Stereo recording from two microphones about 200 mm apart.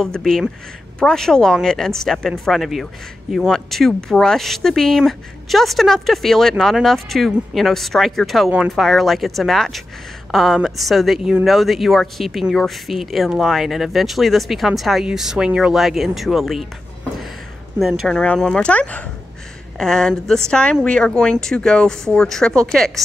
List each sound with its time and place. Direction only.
0.0 s speech: centre (ahead or behind)
17.7 s speech: centre (ahead or behind)